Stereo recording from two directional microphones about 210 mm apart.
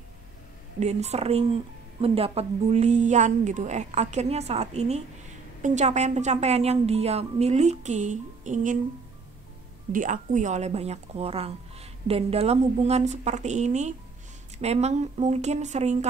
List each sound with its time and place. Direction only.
0.7 s speech: 30° right (ahead or behind)
9.9 s speech: 35° right (ahead or behind)